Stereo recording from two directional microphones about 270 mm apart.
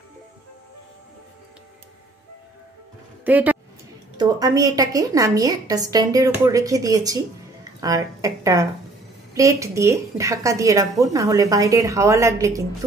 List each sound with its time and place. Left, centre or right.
3.3 s a woman's voice: centre